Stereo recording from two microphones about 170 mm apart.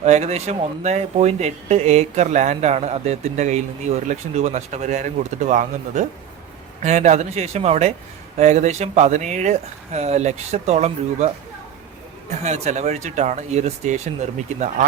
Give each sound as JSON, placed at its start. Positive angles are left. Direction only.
{"t": 0.0, "sound": "speech", "side_deg": -40}
{"t": 12.4, "sound": "speech", "side_deg": -40}